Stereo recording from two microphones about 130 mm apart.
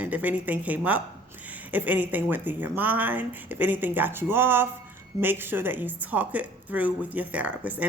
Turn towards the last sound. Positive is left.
turn(degrees=-10)  # may be behind; listen again after turning